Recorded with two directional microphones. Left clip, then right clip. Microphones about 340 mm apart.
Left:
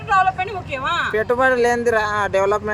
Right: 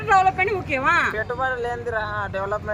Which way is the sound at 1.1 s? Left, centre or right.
Left.